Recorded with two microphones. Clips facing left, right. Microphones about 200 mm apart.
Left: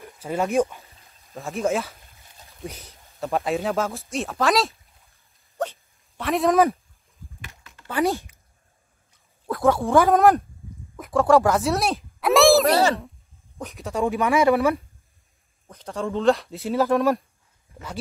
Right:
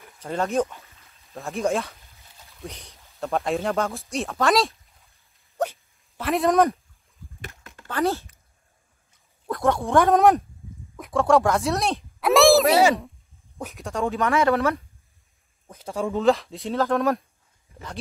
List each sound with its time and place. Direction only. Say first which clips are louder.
0.2 s speech: left 2 dB; 10° left (ahead or behind)
1.3 s speech: even; centre (ahead or behind)
5.6 s dog: right 2 dB; 10° right (ahead or behind)
6.2 s speech: left 1 dB; centre (ahead or behind)
7.4 s a sound: right 8 dB; 50° right (ahead or behind)
7.9 s speech: left 1 dB; 15° left (ahead or behind)
9.5 s speech: left 2 dB; centre (ahead or behind)
14.0 s speech: left 2 dB; 15° left (ahead or behind)
15.6 s speech: right 1 dB; 10° right (ahead or behind)